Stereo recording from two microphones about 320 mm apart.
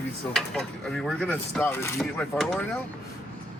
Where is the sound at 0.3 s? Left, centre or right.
Centre.